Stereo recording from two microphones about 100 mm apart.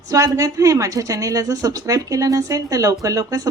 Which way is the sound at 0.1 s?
35° right (ahead or behind).